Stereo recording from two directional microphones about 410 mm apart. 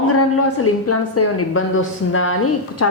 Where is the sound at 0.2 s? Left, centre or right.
Left.